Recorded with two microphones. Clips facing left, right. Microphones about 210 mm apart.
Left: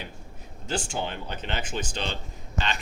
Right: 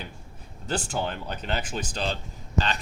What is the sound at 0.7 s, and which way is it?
Speech, 35° right (ahead or behind).